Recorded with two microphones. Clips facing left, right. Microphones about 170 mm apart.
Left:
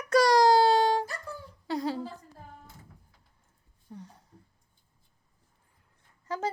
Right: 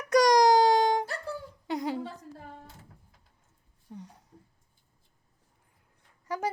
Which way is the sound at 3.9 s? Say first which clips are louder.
Right 1 dB; 15° right (ahead or behind).